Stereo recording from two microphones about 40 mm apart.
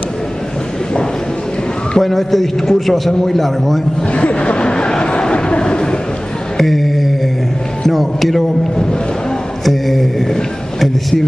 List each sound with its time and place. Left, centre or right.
2.0 s a man's voice: centre
4.1 s a sound: left
6.6 s mantra: centre
7.8 s a man's voice: centre
9.7 s mantra: centre
10.8 s a sound: centre